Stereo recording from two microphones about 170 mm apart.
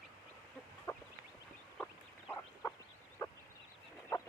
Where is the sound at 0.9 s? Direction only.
20° left (ahead or behind).